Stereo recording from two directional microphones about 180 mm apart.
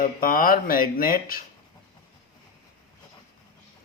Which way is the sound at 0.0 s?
50° left (ahead or behind).